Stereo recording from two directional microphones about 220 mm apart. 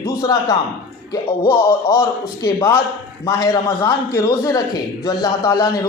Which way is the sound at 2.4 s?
10° left (ahead or behind).